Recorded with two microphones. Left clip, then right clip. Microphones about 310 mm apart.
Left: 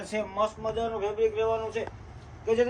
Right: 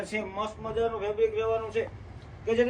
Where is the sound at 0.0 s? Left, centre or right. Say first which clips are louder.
Left 4 dB; left.